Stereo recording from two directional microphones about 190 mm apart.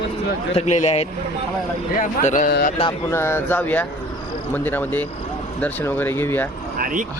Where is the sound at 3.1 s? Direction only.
15° left (ahead or behind).